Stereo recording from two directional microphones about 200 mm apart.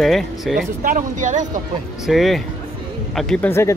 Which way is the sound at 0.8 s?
40° right (ahead or behind).